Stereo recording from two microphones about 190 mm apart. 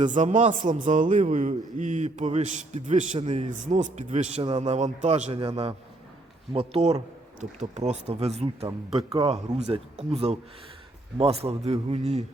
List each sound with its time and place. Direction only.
0.0 s a man's voice: 40° right (ahead or behind)
3.2 s a man's voice: 25° right (ahead or behind)
3.7 s a man's voice: 40° right (ahead or behind)